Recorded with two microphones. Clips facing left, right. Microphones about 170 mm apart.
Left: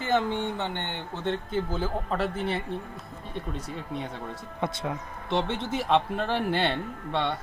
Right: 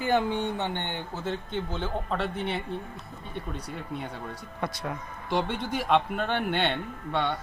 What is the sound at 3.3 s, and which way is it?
Speech, 30° left (ahead or behind).